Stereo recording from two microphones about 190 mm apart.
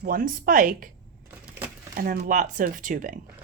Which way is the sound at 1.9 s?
45° right (ahead or behind).